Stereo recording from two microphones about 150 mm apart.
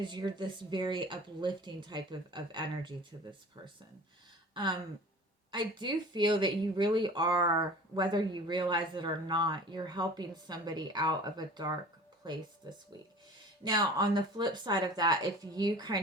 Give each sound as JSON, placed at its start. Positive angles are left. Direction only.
{"t": 0.0, "sound": "speech", "side_deg": -30}
{"t": 4.5, "sound": "speech", "side_deg": -30}